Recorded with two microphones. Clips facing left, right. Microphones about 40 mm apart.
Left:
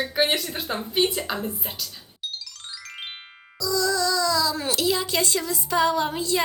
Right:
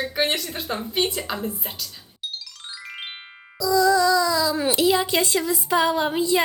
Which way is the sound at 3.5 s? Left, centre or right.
Centre.